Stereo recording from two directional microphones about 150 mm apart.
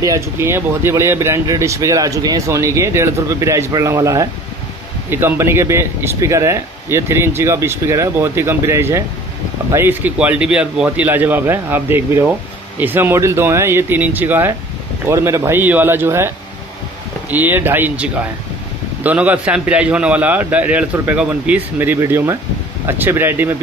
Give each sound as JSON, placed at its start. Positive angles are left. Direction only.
{"t": 0.0, "sound": "speech", "side_deg": -20}
{"t": 17.3, "sound": "speech", "side_deg": -10}